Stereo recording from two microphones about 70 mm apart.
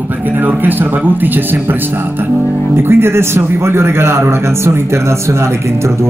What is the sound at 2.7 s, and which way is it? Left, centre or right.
A man's voice, right.